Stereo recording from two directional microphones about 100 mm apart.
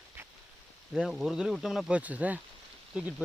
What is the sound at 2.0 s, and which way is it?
Speech, 15° right (ahead or behind).